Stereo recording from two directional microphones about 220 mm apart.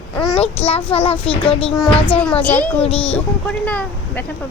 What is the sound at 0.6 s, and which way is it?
A child's voice, 25° left (ahead or behind).